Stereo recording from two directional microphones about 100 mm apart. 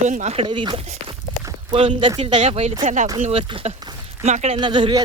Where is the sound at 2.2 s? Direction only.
90° right.